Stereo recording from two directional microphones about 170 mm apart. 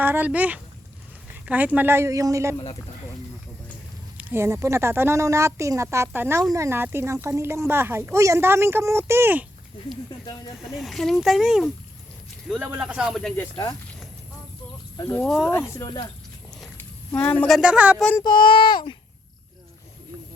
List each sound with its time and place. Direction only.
0.0 s speech: 10° right (ahead or behind)
4.2 s speech: 10° right (ahead or behind)
10.8 s speech: centre (ahead or behind)
15.2 s speech: centre (ahead or behind)
15.7 s speech: 20° left (ahead or behind)
16.7 s a sound: 10° left (ahead or behind)
17.6 s speech: 5° right (ahead or behind)
18.2 s speech: 25° left (ahead or behind)